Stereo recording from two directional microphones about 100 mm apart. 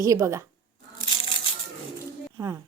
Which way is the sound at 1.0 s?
60° left (ahead or behind).